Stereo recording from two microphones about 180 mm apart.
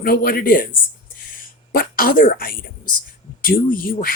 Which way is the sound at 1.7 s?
55° left (ahead or behind).